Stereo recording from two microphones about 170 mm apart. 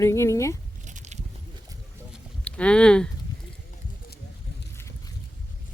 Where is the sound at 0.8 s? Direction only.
45° right (ahead or behind).